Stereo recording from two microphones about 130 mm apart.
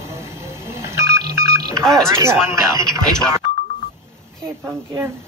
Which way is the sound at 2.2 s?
20° right (ahead or behind).